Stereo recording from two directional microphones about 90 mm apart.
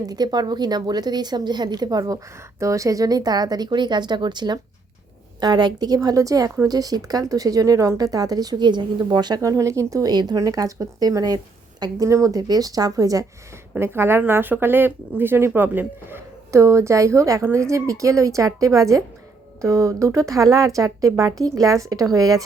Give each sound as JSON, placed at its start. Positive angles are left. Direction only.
{"t": 0.0, "sound": "a woman's voice", "side_deg": -50}
{"t": 9.4, "sound": "speech", "side_deg": -35}
{"t": 13.7, "sound": "speech", "side_deg": -25}